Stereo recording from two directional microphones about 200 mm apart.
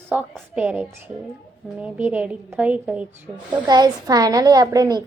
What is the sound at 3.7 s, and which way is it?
A woman's voice, 20° right (ahead or behind).